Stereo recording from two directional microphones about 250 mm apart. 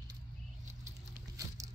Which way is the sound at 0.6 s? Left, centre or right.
Right.